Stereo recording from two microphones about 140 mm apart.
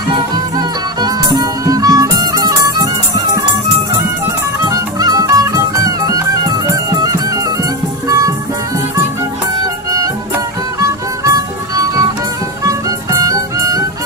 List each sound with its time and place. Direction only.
0.5 s music: 30° right (ahead or behind)
4.6 s music: 25° right (ahead or behind)
10.8 s music: 20° right (ahead or behind)